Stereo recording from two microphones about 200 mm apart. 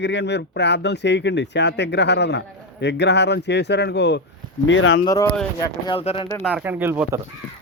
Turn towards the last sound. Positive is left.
turn(degrees=-10)  # may be behind; listen again after turning